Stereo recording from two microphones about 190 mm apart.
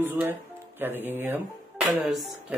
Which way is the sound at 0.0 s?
10° right (ahead or behind).